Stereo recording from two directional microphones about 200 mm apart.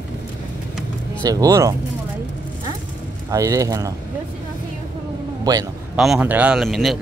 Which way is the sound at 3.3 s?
15° right (ahead or behind).